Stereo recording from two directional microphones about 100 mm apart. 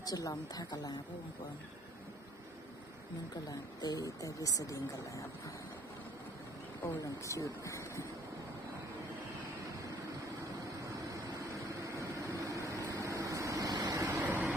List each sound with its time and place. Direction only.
0.0 s speech: 40° left (ahead or behind)
3.5 s speech: 40° left (ahead or behind)
7.0 s speech: 30° left (ahead or behind)
10.8 s a sound: 30° right (ahead or behind)
11.8 s vehicle: 30° right (ahead or behind)